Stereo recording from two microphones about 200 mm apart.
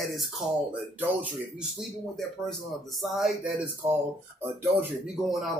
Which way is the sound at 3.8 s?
15° right (ahead or behind).